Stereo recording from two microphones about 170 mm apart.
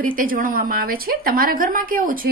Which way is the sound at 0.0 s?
55° right (ahead or behind).